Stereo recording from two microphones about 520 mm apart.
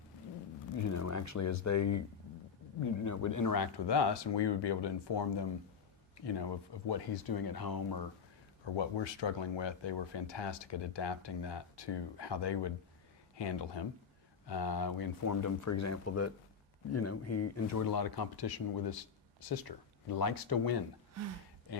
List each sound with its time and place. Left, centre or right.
0.9 s speech: left
6.8 s speech: left
8.6 s speech: left
21.7 s a sound: left